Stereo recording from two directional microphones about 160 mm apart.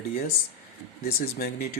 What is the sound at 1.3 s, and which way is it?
Speech, 70° left (ahead or behind).